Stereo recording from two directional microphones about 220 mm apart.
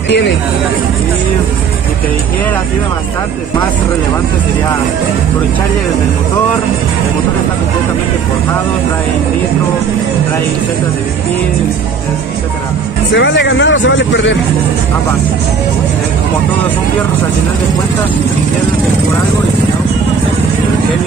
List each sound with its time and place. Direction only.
13.1 s speech: 55° left (ahead or behind)